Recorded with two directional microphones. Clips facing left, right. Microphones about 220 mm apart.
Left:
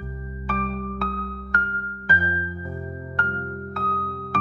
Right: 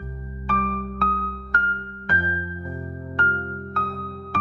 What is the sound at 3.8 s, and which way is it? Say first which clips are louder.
Music: right 1 dB; centre (ahead or behind).